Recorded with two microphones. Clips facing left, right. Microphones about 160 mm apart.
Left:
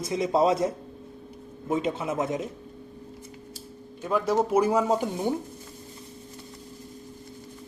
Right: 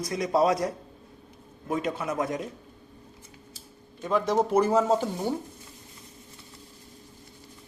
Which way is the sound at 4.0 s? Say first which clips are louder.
Even; 10° left (ahead or behind).